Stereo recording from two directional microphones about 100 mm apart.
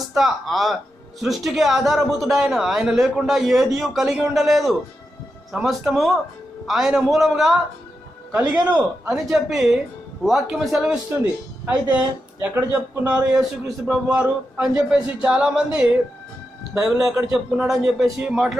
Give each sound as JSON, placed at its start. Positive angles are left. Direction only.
{"t": 0.0, "sound": "a man's voice", "side_deg": 0}
{"t": 8.6, "sound": "a man's voice", "side_deg": -10}
{"t": 9.1, "sound": "a man's voice", "side_deg": 0}
{"t": 11.6, "sound": "a man's voice", "side_deg": -15}